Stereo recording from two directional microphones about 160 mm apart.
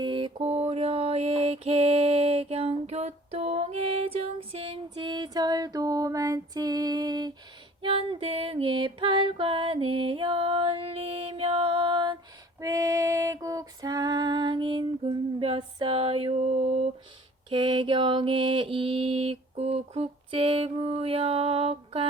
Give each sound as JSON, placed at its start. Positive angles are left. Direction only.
{"t": 0.0, "sound": "mantra", "side_deg": -30}
{"t": 7.8, "sound": "music", "side_deg": -35}
{"t": 12.5, "sound": "female singing", "side_deg": -20}
{"t": 17.5, "sound": "mantra", "side_deg": -30}